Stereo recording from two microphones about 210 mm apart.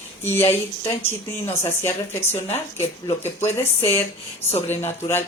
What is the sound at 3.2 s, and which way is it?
Speech, 30° left (ahead or behind).